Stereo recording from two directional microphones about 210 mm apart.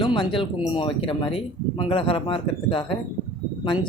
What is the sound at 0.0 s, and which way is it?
Speech, 25° left (ahead or behind).